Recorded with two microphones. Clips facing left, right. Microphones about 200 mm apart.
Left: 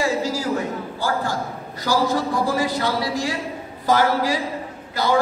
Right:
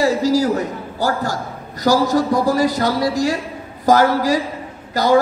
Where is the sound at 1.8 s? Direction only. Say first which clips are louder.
Right 5 dB; 40° right (ahead or behind).